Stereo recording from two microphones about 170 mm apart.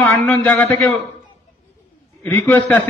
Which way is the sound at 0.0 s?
10° left (ahead or behind).